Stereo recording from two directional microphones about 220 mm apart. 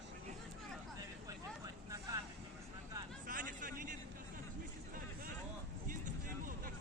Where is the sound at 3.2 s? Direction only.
35° right (ahead or behind).